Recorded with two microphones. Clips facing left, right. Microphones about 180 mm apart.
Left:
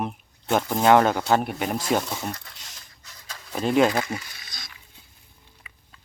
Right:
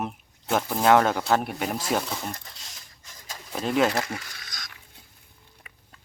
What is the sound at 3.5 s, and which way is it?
Speech, centre (ahead or behind).